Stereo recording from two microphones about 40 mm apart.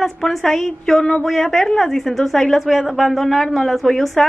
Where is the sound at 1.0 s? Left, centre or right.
Left.